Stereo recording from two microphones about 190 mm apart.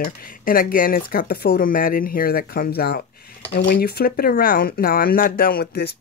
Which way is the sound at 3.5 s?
65° left (ahead or behind).